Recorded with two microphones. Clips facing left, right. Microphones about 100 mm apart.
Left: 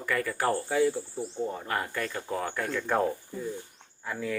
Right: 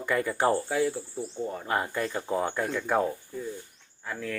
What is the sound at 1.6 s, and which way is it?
Speech, 20° right (ahead or behind).